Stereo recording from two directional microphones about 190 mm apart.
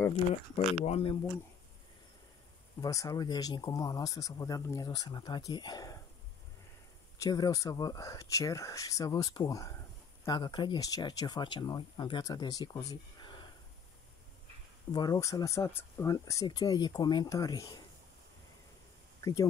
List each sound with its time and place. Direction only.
0.7 s speech: 35° left (ahead or behind)
2.8 s speech: 20° left (ahead or behind)
7.2 s speech: 20° left (ahead or behind)
14.9 s speech: 20° left (ahead or behind)